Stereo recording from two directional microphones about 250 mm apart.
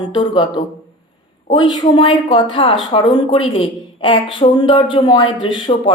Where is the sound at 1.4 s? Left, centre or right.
Centre.